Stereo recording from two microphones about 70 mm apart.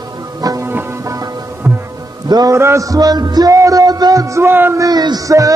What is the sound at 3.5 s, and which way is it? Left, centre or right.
Music, right.